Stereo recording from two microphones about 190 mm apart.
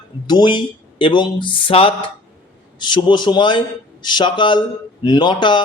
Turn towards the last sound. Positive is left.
turn(degrees=25)  # may be behind; listen again after turning